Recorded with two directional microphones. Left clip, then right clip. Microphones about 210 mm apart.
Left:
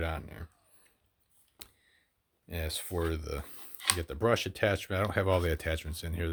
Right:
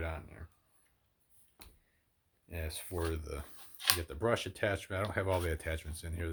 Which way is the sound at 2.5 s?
50° left (ahead or behind).